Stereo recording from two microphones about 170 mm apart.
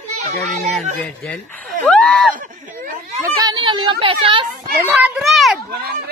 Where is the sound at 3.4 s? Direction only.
30° right (ahead or behind).